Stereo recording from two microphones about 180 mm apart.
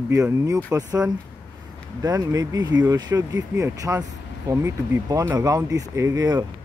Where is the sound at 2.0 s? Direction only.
20° right (ahead or behind).